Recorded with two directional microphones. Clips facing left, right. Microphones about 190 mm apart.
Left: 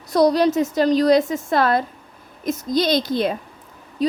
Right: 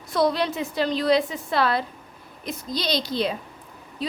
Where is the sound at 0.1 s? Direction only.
40° left (ahead or behind).